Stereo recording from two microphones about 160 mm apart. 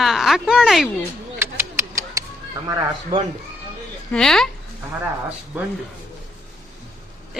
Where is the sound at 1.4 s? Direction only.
15° right (ahead or behind).